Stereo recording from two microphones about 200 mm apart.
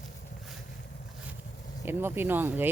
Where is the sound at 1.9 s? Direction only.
10° right (ahead or behind).